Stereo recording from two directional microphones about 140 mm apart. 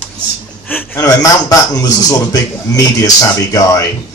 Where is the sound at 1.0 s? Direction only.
25° left (ahead or behind).